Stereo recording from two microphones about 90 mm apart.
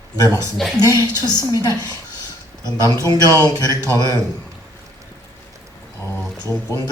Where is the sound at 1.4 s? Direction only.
35° right (ahead or behind).